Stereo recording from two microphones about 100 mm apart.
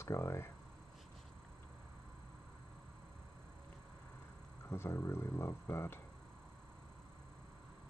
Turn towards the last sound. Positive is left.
turn(degrees=25)  # may be behind; listen again after turning